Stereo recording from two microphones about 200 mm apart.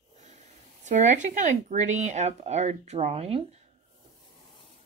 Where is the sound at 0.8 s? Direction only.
35° right (ahead or behind).